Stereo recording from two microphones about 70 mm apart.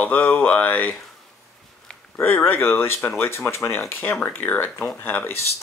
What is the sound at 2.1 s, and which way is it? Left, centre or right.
Speech, left.